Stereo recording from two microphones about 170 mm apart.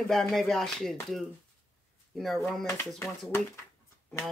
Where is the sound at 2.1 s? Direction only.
Centre (ahead or behind).